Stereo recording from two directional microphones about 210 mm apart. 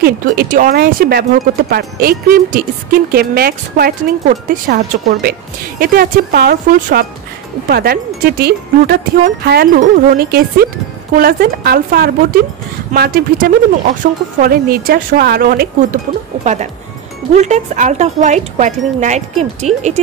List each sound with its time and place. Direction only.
0.0 s a woman's voice: 45° right (ahead or behind)
17.3 s speech: 35° right (ahead or behind)